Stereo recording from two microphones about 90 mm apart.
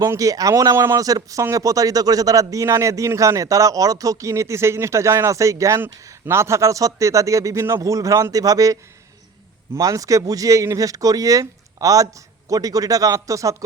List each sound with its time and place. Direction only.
0.0 s speech: 40° right (ahead or behind)